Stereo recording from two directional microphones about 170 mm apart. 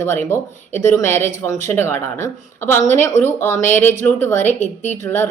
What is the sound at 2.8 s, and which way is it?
Speech, 40° left (ahead or behind).